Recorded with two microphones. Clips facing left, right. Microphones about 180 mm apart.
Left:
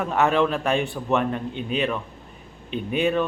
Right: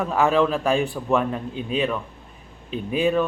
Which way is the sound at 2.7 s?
30° right (ahead or behind).